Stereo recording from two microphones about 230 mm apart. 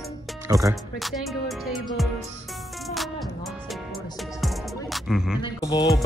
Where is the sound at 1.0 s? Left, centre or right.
Centre.